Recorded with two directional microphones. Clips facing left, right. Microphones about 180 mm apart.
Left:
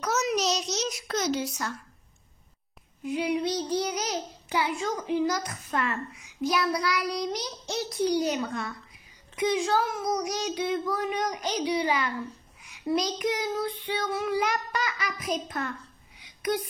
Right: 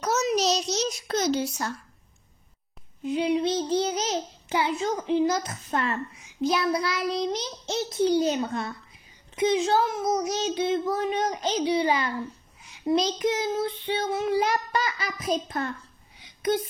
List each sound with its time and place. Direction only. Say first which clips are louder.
0.0 s a sound: right 3 dB; 30° right (ahead or behind)
3.0 s a child's voice: right 3 dB; 25° right (ahead or behind)
16.2 s whispering: right 3 dB; 25° right (ahead or behind)